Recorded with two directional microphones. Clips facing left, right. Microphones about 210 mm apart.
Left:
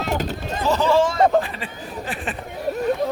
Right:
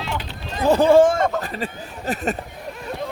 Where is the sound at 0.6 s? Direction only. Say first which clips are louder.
Right 5 dB; 55° right (ahead or behind).